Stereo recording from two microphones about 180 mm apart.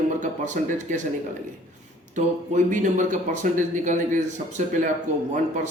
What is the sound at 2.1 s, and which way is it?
Speech, 45° right (ahead or behind).